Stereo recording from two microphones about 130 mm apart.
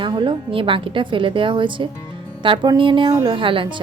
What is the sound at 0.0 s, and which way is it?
A woman's voice, 35° right (ahead or behind).